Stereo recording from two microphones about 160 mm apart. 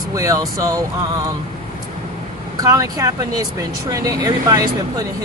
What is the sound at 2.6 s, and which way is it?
Speech, 20° right (ahead or behind).